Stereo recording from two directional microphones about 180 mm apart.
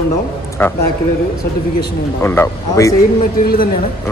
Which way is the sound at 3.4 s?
55° left (ahead or behind).